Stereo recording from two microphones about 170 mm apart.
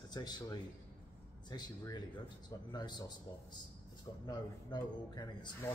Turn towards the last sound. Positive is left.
turn(degrees=25)  # may be behind; listen again after turning